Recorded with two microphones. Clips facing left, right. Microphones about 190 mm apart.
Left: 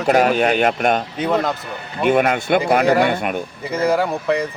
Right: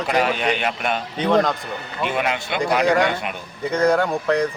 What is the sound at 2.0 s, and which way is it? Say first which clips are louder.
Speech: left 7 dB; 50° left (ahead or behind).